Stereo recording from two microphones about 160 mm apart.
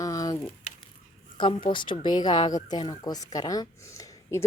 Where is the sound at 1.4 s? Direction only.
30° left (ahead or behind).